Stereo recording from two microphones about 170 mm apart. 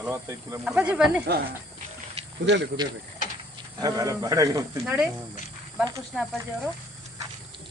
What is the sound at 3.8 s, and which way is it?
A man's voice, 20° right (ahead or behind).